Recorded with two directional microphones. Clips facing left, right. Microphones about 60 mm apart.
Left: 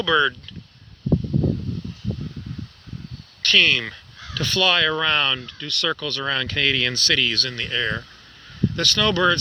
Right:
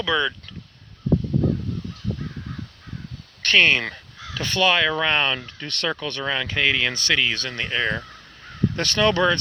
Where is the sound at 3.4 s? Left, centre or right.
Right.